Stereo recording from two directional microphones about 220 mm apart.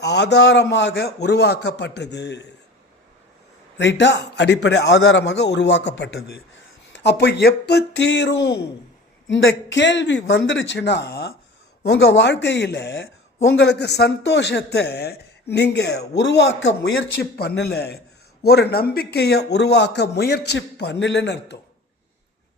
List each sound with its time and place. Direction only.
0.0 s a woman's voice: 50° left (ahead or behind)
3.8 s a woman's voice: 55° left (ahead or behind)